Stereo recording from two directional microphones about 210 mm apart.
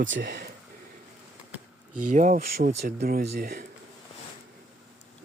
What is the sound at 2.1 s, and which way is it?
Speech, 40° right (ahead or behind).